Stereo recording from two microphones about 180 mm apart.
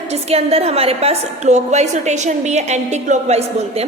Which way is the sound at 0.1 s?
35° right (ahead or behind).